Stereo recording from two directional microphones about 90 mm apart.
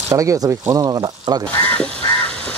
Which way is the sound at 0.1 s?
35° right (ahead or behind).